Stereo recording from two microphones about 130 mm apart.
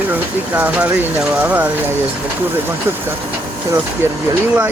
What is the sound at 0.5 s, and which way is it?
Speech, 15° right (ahead or behind).